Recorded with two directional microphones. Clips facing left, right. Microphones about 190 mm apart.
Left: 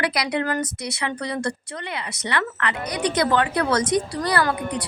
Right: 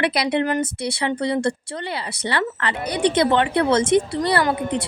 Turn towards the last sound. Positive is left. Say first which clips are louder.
# right 2 dB
turn(degrees=-25)  # may be behind; listen again after turning